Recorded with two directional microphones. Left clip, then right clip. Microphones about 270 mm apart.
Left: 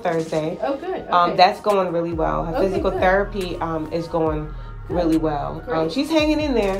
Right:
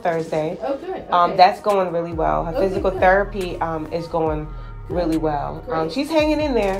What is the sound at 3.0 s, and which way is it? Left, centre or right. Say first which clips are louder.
Speech: right 3 dB; centre.